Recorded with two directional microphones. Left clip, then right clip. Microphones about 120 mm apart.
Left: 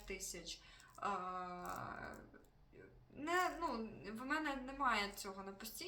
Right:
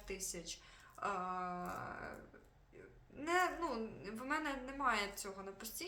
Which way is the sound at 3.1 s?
25° right (ahead or behind).